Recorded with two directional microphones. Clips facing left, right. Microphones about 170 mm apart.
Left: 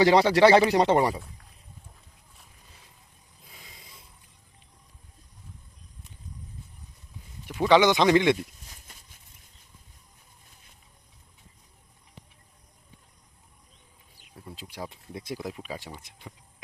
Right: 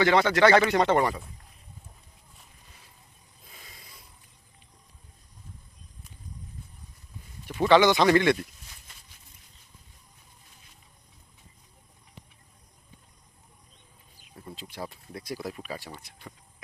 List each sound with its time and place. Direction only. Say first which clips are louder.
0.0 s speech: left 3 dB; 35° left (ahead or behind)
3.5 s a sound: even; 15° left (ahead or behind)
7.7 s speech: even; 15° left (ahead or behind)
14.3 s speech: even; 5° left (ahead or behind)